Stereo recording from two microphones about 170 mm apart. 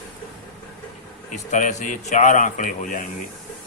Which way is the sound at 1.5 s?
45° left (ahead or behind).